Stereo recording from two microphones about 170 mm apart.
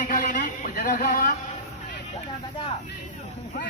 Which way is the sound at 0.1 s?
50° left (ahead or behind).